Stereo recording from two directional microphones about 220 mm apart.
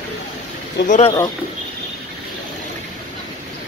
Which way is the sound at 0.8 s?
30° left (ahead or behind).